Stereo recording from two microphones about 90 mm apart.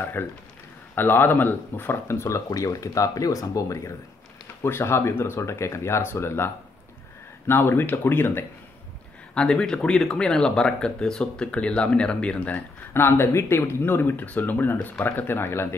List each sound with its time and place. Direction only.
0.0 s speech: 25° left (ahead or behind)
9.3 s speech: 10° left (ahead or behind); by 15.7 s 25° left (ahead or behind)